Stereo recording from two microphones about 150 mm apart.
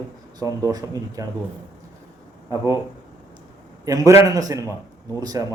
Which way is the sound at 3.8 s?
25° right (ahead or behind).